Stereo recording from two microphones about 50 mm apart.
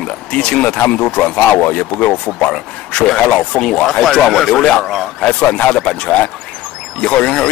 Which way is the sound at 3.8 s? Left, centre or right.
Centre.